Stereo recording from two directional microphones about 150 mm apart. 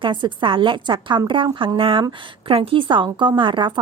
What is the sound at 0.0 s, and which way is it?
A woman's voice, 30° right (ahead or behind).